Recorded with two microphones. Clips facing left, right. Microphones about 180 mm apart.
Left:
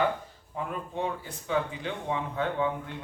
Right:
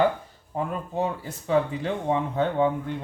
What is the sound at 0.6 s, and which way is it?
Speech, 40° right (ahead or behind).